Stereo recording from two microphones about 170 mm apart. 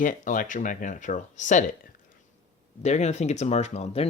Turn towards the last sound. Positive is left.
turn(degrees=40)  # may be behind; listen again after turning